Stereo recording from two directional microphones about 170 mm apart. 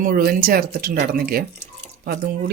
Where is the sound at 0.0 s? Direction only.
60° right (ahead or behind).